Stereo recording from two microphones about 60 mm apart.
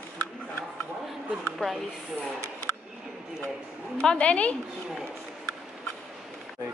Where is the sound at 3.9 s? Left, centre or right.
Left.